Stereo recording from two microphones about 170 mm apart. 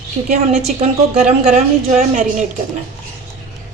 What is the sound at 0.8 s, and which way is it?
A woman's voice, 40° right (ahead or behind).